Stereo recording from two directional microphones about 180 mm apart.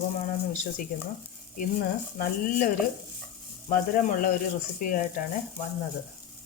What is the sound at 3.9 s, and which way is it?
Speech, 50° left (ahead or behind).